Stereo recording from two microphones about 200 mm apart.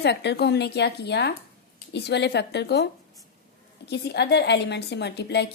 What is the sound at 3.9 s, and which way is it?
A woman's voice, 55° left (ahead or behind).